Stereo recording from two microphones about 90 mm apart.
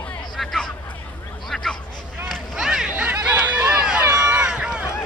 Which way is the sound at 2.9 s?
15° right (ahead or behind).